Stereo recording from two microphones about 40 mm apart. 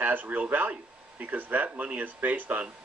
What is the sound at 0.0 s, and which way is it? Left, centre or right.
Speech, right.